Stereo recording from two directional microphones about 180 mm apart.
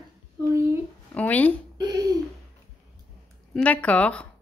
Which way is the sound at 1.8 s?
20° right (ahead or behind).